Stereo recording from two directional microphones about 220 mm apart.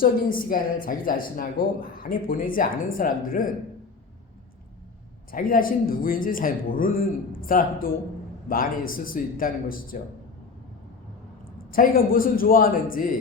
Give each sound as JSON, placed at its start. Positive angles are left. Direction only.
{"t": 0.0, "sound": "speech", "side_deg": 40}
{"t": 5.3, "sound": "speech", "side_deg": 40}
{"t": 11.5, "sound": "speech", "side_deg": 40}